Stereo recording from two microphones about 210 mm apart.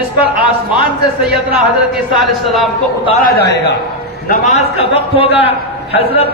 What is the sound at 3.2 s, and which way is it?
Speech, 50° left (ahead or behind).